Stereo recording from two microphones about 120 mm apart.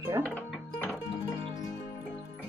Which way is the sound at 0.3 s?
15° left (ahead or behind).